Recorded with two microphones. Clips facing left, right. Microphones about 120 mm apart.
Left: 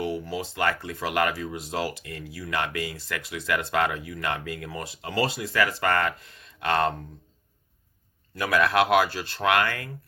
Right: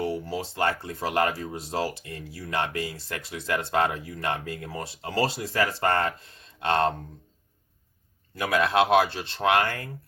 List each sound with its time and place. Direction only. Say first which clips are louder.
0.3 s speech: even; 35° right (ahead or behind)
8.4 s speech: even; 25° right (ahead or behind)